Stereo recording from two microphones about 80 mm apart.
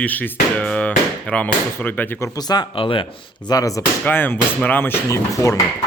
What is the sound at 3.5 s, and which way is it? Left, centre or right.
Speech, left.